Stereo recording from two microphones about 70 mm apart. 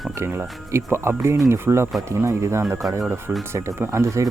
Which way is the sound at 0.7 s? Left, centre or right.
Right.